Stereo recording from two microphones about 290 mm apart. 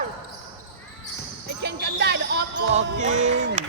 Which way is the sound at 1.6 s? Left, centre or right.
Right.